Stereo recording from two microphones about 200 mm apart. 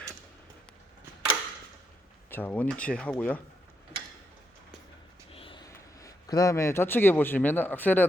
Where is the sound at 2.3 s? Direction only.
10° left (ahead or behind).